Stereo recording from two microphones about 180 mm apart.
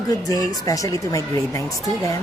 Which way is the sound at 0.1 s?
20° left (ahead or behind).